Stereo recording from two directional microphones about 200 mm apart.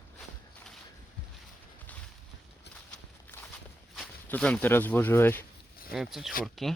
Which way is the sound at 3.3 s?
10° left (ahead or behind).